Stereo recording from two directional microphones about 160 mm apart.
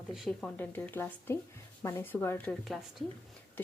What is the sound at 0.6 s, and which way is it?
A woman's voice, 10° left (ahead or behind).